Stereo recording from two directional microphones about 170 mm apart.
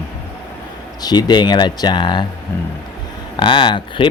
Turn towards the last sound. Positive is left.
turn(degrees=25)  # may be behind; listen again after turning